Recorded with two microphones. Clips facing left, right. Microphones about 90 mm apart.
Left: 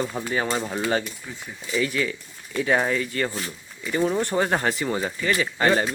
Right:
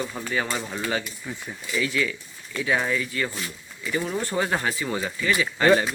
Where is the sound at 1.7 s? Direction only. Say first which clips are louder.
Left 1 dB; 30° left (ahead or behind).